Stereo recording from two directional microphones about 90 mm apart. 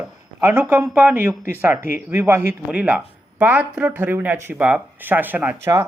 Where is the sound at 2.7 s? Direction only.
10° right (ahead or behind).